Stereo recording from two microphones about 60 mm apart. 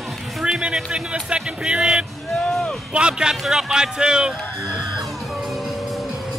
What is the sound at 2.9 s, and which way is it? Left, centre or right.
Speech, centre.